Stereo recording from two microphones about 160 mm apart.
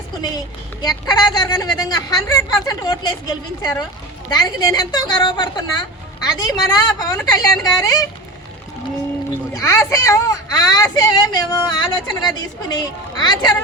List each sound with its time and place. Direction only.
0.2 s a woman's voice: 25° left (ahead or behind)
9.6 s a woman's voice: 20° left (ahead or behind)